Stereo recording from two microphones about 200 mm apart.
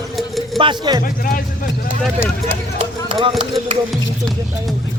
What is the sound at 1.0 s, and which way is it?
Speech, 45° left (ahead or behind).